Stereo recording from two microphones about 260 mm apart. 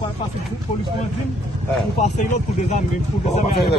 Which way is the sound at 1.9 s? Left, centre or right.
Left.